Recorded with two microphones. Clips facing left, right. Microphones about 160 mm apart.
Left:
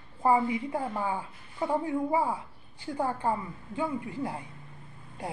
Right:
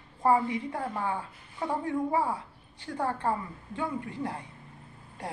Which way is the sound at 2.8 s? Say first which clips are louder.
Left 1 dB; 5° left (ahead or behind).